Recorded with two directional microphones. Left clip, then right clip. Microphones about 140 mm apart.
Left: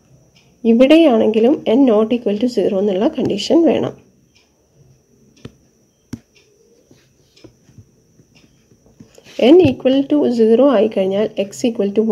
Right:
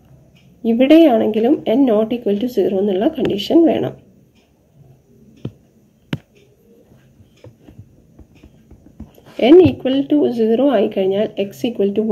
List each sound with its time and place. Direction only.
0.6 s speech: 25° left (ahead or behind)
9.4 s speech: 30° left (ahead or behind)